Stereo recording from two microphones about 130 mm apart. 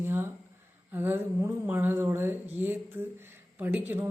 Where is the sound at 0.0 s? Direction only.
15° right (ahead or behind).